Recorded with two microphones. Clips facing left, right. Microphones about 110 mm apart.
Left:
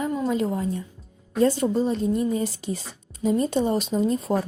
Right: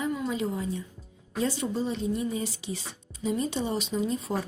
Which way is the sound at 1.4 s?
45° left (ahead or behind).